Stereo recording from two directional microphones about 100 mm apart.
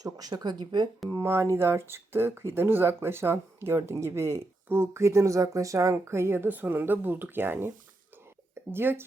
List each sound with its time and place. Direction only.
0.0 s speech: 40° right (ahead or behind)
1.1 s speech: 25° right (ahead or behind)
8.7 s speech: 20° right (ahead or behind)